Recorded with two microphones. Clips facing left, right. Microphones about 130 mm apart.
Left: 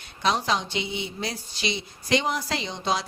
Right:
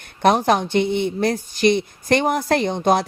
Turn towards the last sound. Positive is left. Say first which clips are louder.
# right 10 dB
turn(degrees=-55)  # may be behind; listen again after turning